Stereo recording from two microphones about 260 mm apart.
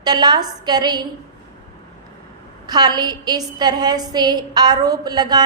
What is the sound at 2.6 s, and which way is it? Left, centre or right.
A woman's voice, centre.